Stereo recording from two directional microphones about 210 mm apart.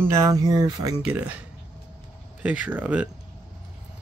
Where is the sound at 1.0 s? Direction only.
5° right (ahead or behind).